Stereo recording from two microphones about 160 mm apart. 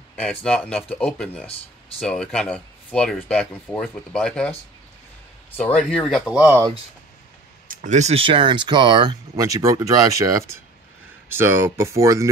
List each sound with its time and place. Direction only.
0.1 s speech: 5° left (ahead or behind)
5.6 s speech: 5° left (ahead or behind)
6.4 s speech: 15° right (ahead or behind)
7.6 s speech: 55° right (ahead or behind); by 12.3 s 20° right (ahead or behind)